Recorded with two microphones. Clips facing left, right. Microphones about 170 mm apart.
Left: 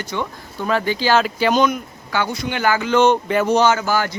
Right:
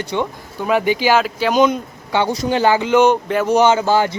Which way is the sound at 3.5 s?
25° right (ahead or behind).